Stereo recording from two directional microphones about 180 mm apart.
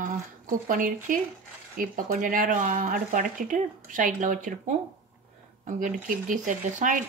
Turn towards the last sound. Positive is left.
turn(degrees=-45)  # may be behind; listen again after turning